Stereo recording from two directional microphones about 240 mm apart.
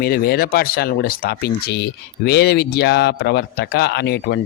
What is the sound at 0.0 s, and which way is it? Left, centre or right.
Speech, left.